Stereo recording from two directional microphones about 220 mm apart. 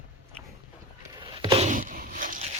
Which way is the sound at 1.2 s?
20° right (ahead or behind).